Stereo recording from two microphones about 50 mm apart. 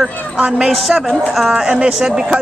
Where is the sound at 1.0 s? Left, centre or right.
Centre.